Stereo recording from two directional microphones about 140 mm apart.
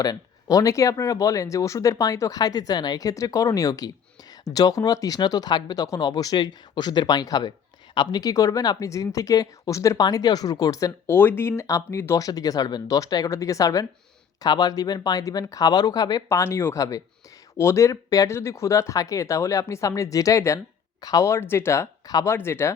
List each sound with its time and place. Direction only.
0.0 s speech: 25° left (ahead or behind)